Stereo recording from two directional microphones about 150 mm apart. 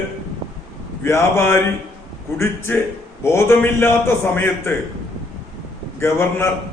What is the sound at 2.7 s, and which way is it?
A man's voice, 15° left (ahead or behind).